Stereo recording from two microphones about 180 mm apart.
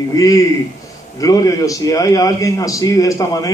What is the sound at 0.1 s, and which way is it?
A man's voice, 20° left (ahead or behind).